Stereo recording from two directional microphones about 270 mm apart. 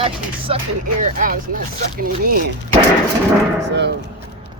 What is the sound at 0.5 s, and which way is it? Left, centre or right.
Speech, right.